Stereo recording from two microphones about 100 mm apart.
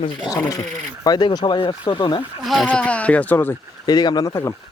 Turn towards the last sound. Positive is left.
turn(degrees=35)  # may be behind; listen again after turning